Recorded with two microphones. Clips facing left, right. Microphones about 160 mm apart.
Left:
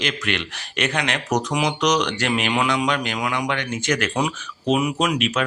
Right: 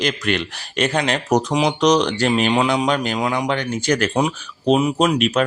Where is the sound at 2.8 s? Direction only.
35° right (ahead or behind).